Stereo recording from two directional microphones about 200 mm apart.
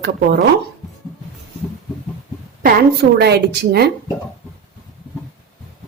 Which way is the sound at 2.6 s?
55° right (ahead or behind).